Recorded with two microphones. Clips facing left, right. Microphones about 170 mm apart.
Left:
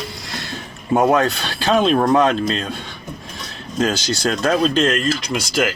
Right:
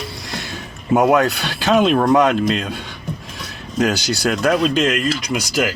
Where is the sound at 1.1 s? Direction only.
15° right (ahead or behind).